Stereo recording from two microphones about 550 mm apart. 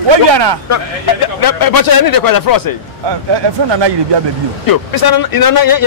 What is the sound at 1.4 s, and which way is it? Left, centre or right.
Speech, left.